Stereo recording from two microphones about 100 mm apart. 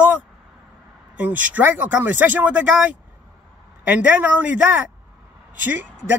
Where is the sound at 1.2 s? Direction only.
15° right (ahead or behind).